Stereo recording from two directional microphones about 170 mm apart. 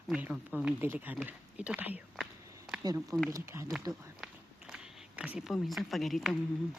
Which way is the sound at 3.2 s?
20° right (ahead or behind).